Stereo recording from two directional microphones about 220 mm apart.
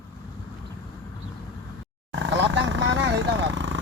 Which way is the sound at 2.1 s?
55° right (ahead or behind).